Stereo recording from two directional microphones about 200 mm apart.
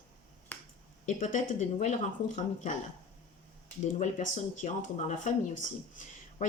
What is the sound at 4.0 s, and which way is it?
Speech, 40° left (ahead or behind).